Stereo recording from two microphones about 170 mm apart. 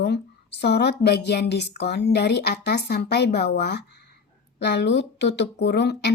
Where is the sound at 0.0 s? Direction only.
80° left.